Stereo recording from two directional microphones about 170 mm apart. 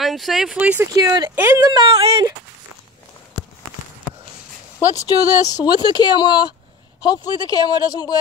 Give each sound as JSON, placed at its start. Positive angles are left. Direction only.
{"t": 0.0, "sound": "speech", "side_deg": 0}
{"t": 0.9, "sound": "speech", "side_deg": -25}
{"t": 1.3, "sound": "speech", "side_deg": -15}
{"t": 1.7, "sound": "speech", "side_deg": -30}
{"t": 4.7, "sound": "speech", "side_deg": 20}